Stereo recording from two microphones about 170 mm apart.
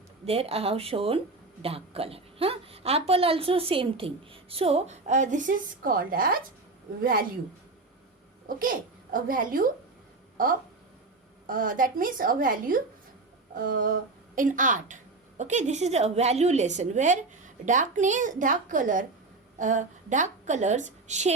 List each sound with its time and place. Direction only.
0.3 s a woman's voice: 35° right (ahead or behind); by 6.4 s 55° right (ahead or behind)
8.4 s a woman's voice: 55° right (ahead or behind)
11.4 s a woman's voice: 55° right (ahead or behind)